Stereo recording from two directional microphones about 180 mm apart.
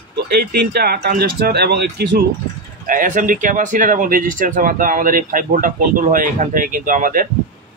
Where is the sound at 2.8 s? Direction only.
50° right (ahead or behind).